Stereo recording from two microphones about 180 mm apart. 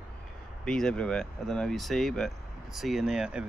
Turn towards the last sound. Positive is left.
turn(degrees=-5)  # may be behind; listen again after turning